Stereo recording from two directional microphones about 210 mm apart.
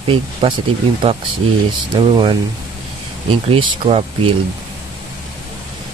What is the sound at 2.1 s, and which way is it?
Speech, 25° right (ahead or behind).